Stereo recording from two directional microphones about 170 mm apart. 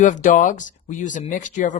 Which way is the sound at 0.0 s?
45° left (ahead or behind).